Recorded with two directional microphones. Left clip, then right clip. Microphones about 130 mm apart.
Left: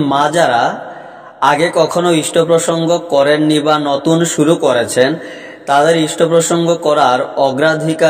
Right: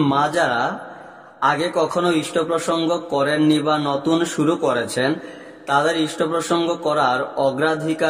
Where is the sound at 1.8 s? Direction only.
30° left (ahead or behind).